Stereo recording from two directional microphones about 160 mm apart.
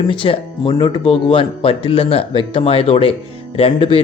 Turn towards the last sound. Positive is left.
turn(degrees=35)  # may be behind; listen again after turning